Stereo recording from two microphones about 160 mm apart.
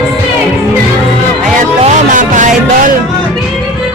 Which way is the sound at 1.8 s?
50° right (ahead or behind).